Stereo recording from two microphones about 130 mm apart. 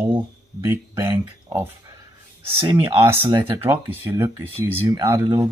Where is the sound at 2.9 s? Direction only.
20° right (ahead or behind).